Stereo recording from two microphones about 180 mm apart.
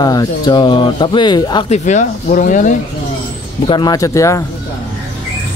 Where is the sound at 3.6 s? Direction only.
25° left (ahead or behind).